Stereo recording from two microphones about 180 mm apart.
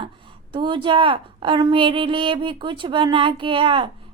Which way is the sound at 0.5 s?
25° right (ahead or behind).